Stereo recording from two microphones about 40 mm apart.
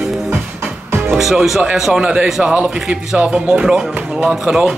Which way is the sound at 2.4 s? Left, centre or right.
Right.